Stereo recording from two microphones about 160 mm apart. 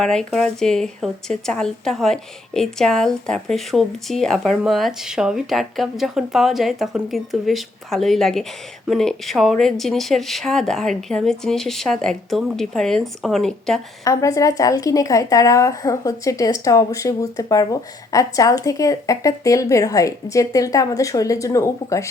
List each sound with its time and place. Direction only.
0.0 s speech: 5° left (ahead or behind)
14.0 s speech: 20° left (ahead or behind)